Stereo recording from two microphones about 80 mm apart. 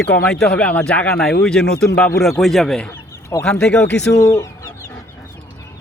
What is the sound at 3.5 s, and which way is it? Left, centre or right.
Speech, centre.